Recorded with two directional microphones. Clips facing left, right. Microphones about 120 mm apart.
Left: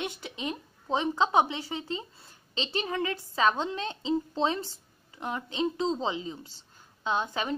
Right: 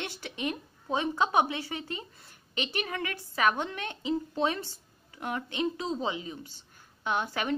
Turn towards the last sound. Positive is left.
turn(degrees=20)  # may be behind; listen again after turning